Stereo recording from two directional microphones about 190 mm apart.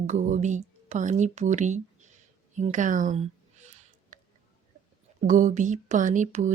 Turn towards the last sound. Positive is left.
turn(degrees=-40)  # may be behind; listen again after turning